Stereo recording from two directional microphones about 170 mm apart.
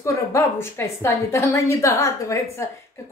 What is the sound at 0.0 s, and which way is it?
A woman's voice, 20° left (ahead or behind).